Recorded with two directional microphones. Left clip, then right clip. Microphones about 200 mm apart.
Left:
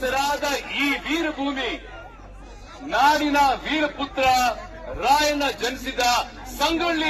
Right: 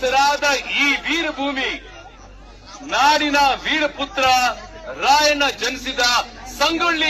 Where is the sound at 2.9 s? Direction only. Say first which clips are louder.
Right 3 dB; 5° left (ahead or behind).